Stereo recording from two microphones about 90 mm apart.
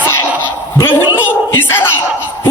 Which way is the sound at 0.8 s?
25° left (ahead or behind).